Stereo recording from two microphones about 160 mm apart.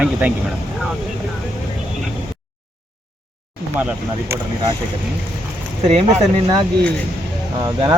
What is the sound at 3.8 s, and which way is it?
Speech, 10° right (ahead or behind).